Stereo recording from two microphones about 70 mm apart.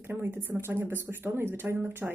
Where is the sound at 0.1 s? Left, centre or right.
Right.